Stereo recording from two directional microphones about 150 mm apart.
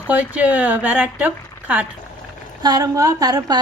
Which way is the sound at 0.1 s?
10° right (ahead or behind).